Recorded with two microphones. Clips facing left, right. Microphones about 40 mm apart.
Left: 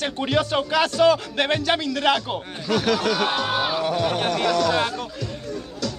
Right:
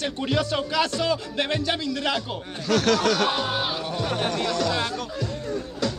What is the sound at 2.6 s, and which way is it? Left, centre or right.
Speech, centre.